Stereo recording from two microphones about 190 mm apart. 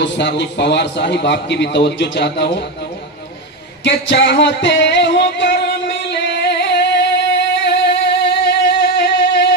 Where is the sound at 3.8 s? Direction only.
65° left (ahead or behind).